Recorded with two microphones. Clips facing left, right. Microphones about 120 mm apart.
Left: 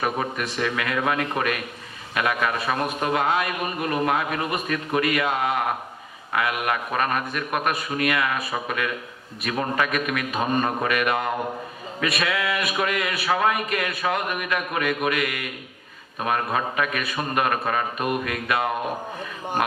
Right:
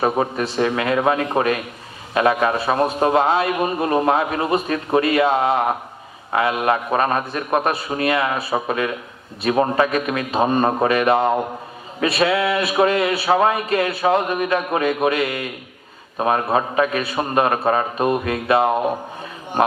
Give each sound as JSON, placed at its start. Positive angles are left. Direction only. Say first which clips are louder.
{"t": 0.0, "sound": "a man's voice", "louder": "right 6 dB", "side_deg": -30}